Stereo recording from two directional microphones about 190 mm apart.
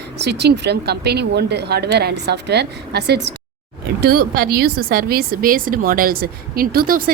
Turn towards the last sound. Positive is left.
turn(degrees=-50)  # may be behind; listen again after turning